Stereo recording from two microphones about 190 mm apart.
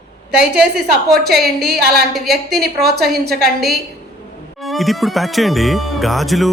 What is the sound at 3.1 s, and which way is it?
Speech, 55° right (ahead or behind).